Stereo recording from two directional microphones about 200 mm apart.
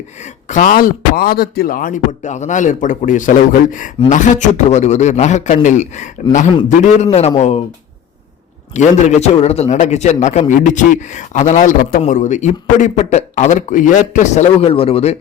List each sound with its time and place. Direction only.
0.2 s a man's voice: 40° left (ahead or behind)
8.7 s a man's voice: 35° left (ahead or behind)